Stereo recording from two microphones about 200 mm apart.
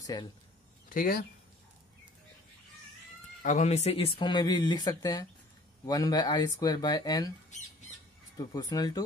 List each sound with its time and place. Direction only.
0.0 s speech: 20° left (ahead or behind)
0.8 s speech: 45° left (ahead or behind)
3.4 s speech: 35° left (ahead or behind); by 7.3 s 20° left (ahead or behind)
8.4 s speech: 20° left (ahead or behind)